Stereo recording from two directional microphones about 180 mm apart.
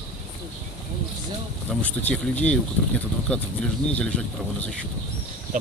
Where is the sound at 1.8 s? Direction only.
10° left (ahead or behind).